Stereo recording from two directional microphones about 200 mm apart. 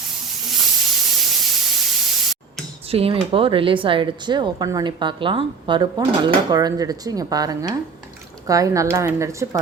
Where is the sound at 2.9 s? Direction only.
30° right (ahead or behind).